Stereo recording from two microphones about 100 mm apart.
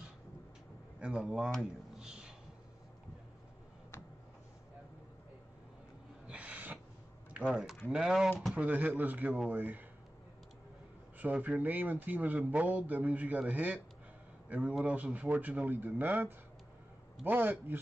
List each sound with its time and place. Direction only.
1.0 s a man's voice: 10° right (ahead or behind)
1.6 s a sound: 5° right (ahead or behind)
6.2 s a sound: 15° right (ahead or behind)
7.4 s a man's voice: 5° right (ahead or behind)
8.5 s a man's voice: 15° right (ahead or behind)
11.1 s a man's voice: 15° right (ahead or behind)